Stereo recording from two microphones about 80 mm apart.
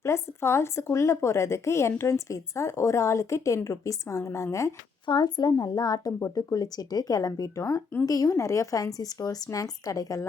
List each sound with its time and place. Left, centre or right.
0.0 s a woman's voice: left
4.2 s a woman's voice: left
5.0 s a woman's voice: left